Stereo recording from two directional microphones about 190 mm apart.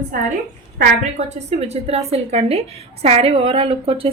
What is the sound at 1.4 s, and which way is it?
A woman's voice, 35° right (ahead or behind).